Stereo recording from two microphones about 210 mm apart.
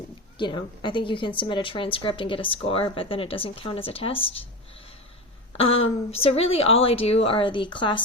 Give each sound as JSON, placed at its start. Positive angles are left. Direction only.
{"t": 0.3, "sound": "speech", "side_deg": 20}
{"t": 5.7, "sound": "a woman's voice", "side_deg": 70}
{"t": 6.1, "sound": "speech", "side_deg": 30}